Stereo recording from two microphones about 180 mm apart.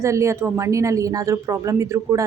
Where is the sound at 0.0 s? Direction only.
15° right (ahead or behind).